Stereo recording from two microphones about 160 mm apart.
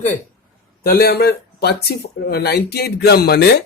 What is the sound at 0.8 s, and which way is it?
Speech, 85° left.